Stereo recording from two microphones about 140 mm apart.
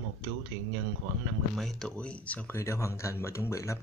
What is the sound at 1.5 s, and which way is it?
Speech, 5° left (ahead or behind).